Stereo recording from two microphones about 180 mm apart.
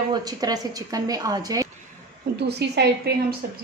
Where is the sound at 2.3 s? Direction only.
65° right (ahead or behind).